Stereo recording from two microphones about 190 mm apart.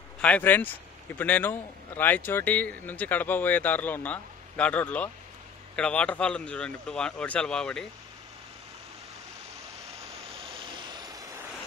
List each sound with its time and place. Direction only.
0.2 s speech: 10° left (ahead or behind)
10.9 s vehicle: 20° right (ahead or behind)